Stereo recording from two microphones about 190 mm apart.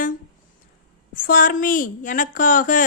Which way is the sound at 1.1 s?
45° left (ahead or behind).